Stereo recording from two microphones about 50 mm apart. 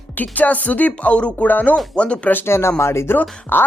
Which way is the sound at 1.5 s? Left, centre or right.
Left.